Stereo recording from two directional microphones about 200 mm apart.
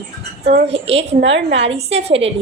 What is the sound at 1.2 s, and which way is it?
Speech, 65° right (ahead or behind).